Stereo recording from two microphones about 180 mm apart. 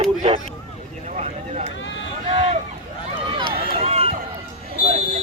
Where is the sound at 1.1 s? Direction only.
35° right (ahead or behind).